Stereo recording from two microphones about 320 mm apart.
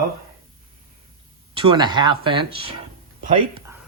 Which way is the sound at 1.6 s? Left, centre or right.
Centre.